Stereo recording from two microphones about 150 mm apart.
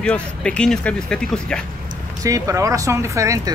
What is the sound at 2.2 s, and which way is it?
Speech, 20° right (ahead or behind).